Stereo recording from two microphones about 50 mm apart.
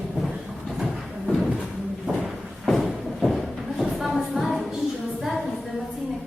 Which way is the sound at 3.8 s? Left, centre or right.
Centre.